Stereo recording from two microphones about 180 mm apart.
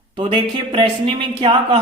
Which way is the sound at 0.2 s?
25° right (ahead or behind).